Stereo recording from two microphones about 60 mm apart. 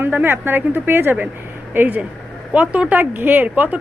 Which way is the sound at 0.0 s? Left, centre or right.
Right.